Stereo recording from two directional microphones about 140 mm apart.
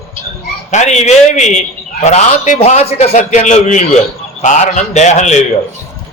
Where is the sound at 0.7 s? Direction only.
55° left (ahead or behind).